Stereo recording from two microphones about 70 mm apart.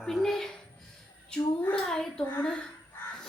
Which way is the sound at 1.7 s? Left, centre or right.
Centre.